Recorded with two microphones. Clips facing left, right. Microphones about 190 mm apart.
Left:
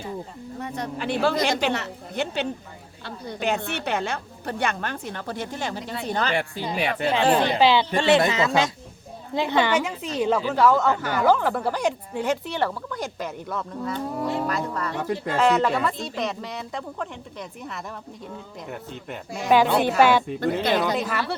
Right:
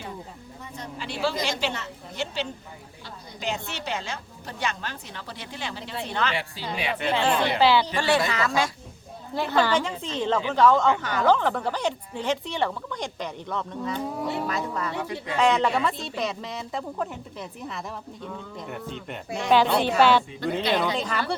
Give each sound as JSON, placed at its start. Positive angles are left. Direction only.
{"t": 0.6, "sound": "a woman's voice", "side_deg": 60}
{"t": 7.6, "sound": "a woman's voice", "side_deg": 20}
{"t": 14.9, "sound": "speech", "side_deg": 50}
{"t": 15.4, "sound": "a woman's voice", "side_deg": 0}
{"t": 20.2, "sound": "speech", "side_deg": 55}
{"t": 21.0, "sound": "speech", "side_deg": 5}